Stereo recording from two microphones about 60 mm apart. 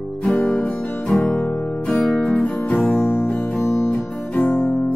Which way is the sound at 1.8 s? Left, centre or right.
Centre.